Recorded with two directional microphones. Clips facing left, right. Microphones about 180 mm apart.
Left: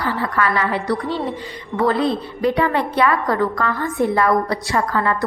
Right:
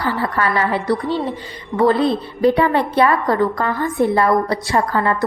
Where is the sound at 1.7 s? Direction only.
20° right (ahead or behind).